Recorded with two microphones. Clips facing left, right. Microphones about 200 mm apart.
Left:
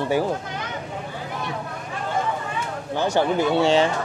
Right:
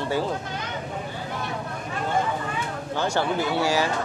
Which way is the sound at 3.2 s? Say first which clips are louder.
Left 6 dB; 20° left (ahead or behind).